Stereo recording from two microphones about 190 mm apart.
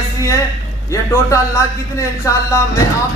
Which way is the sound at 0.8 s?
15° left (ahead or behind).